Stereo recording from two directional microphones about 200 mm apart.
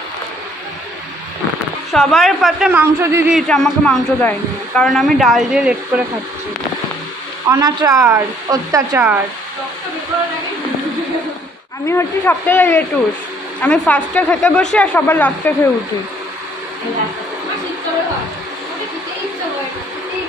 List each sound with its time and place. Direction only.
1.9 s a man's voice: centre (ahead or behind)
3.3 s a man's voice: centre (ahead or behind)
7.4 s speech: 15° right (ahead or behind)
11.8 s a woman's voice: 10° left (ahead or behind)